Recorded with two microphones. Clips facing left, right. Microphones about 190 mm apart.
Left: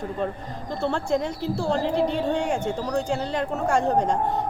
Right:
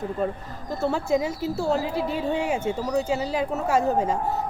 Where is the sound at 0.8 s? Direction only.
5° right (ahead or behind).